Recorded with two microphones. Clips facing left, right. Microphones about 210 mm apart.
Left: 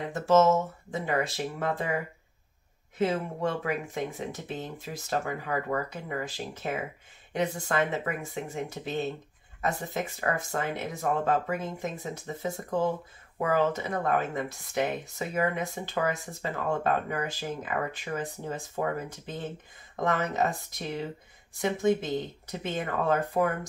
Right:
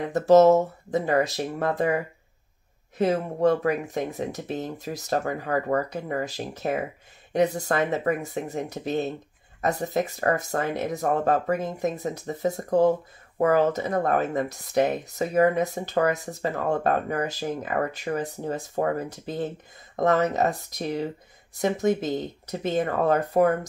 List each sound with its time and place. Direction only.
0.1 s speech: 40° right (ahead or behind)
3.0 s speech: 40° right (ahead or behind)